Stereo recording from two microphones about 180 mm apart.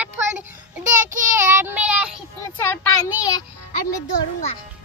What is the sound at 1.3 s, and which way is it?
Child singing, 15° right (ahead or behind).